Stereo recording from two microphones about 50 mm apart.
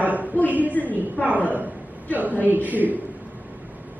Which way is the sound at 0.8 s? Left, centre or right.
Right.